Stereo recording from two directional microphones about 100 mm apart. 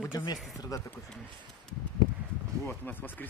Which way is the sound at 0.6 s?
35° left (ahead or behind).